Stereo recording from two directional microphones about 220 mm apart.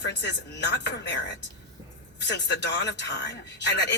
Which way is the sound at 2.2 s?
50° left (ahead or behind).